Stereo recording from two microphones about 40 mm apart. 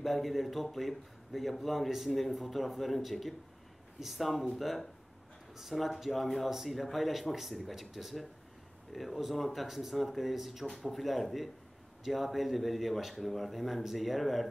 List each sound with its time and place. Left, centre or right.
0.0 s speech: centre